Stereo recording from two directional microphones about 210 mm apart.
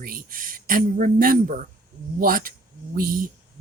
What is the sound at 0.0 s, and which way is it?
A woman's voice, 40° right (ahead or behind).